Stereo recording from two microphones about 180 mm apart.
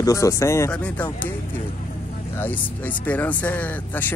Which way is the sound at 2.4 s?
10° left (ahead or behind).